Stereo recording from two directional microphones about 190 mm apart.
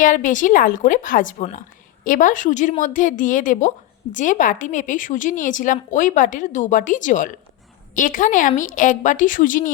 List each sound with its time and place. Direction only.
0.0 s a woman's voice: 45° left (ahead or behind)